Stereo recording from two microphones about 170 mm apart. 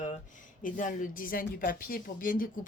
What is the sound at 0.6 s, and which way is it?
Speech, 50° left (ahead or behind).